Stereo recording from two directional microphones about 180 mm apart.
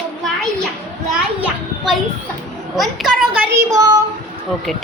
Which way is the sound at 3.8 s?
20° right (ahead or behind).